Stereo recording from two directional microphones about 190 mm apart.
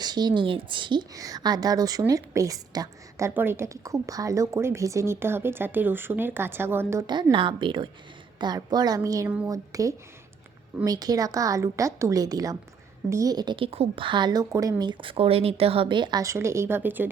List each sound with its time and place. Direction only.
0.0 s a woman's voice: 20° right (ahead or behind)
7.1 s a woman's voice: 25° right (ahead or behind)